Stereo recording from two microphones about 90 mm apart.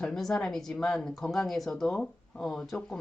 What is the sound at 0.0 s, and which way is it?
Speech, 5° left (ahead or behind).